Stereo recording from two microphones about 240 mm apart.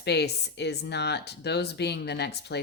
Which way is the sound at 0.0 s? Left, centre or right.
Left.